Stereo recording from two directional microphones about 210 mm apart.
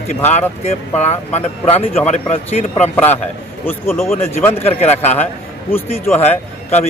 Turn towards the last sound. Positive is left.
turn(degrees=30)  # may be behind; listen again after turning